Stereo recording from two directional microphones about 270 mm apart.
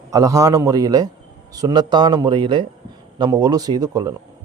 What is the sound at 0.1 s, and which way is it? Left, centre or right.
A man's voice, centre.